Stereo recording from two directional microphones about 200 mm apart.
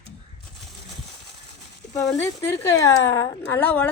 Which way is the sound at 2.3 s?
15° left (ahead or behind).